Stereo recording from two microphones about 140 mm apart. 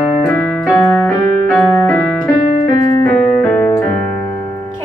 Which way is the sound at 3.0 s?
10° left (ahead or behind).